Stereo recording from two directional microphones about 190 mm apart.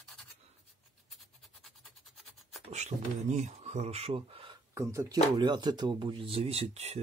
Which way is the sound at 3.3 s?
35° right (ahead or behind).